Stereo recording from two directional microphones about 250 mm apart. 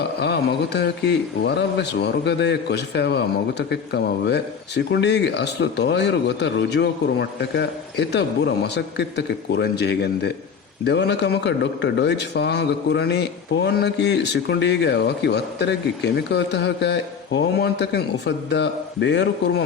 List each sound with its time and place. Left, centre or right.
0.2 s speech: left